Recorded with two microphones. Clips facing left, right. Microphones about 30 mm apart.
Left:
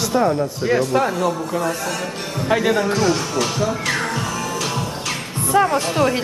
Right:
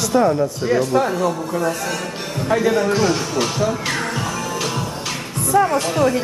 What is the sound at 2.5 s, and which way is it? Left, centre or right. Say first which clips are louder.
Speech: even; left.